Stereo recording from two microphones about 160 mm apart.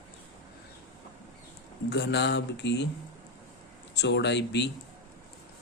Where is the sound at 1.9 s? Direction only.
90° left.